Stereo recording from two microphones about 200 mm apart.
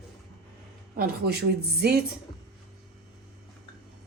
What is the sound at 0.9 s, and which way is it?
A woman's voice, 50° right (ahead or behind).